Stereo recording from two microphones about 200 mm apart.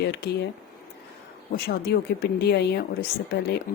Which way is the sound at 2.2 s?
55° left (ahead or behind).